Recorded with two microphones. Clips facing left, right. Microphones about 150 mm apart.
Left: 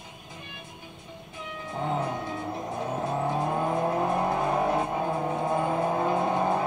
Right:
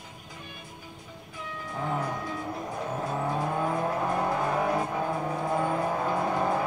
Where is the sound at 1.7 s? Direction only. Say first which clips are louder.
Left 2 dB; 25° left (ahead or behind).